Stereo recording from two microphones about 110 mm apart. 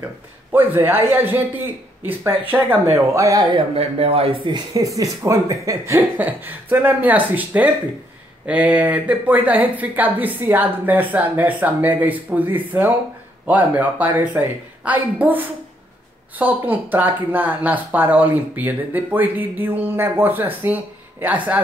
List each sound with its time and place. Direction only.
0.5 s speech: 20° right (ahead or behind)
3.5 s speech: 65° right (ahead or behind)
4.7 s speech: 30° right (ahead or behind)
6.1 s speech: 15° right (ahead or behind)